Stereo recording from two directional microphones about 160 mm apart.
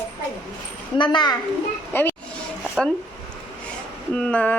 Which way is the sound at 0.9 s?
30° left (ahead or behind).